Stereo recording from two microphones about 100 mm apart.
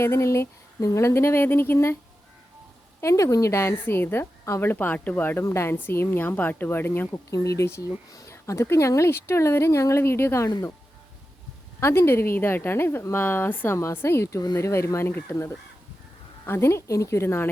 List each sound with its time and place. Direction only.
0.0 s speech: 25° left (ahead or behind)
3.0 s speech: 30° left (ahead or behind)
7.3 s speech: 35° left (ahead or behind)
11.8 s speech: 25° left (ahead or behind)